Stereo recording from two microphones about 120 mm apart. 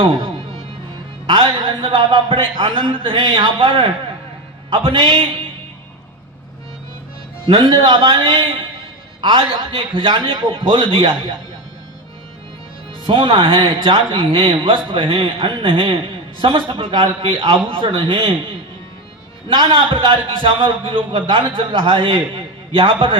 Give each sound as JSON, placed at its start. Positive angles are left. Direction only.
{"t": 0.0, "sound": "a man's voice", "side_deg": -45}
{"t": 1.3, "sound": "a man's voice", "side_deg": -45}
{"t": 7.4, "sound": "a man's voice", "side_deg": -45}
{"t": 13.1, "sound": "a man's voice", "side_deg": -45}
{"t": 19.5, "sound": "a man's voice", "side_deg": -45}